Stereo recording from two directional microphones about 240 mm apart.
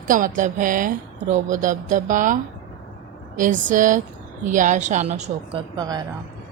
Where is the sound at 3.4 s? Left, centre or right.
Right.